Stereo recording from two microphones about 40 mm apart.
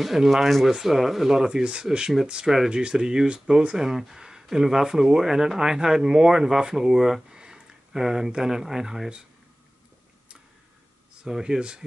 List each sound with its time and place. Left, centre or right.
0.0 s speech: centre
11.2 s speech: centre